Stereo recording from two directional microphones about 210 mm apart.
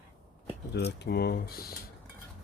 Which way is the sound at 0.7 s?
50° left (ahead or behind).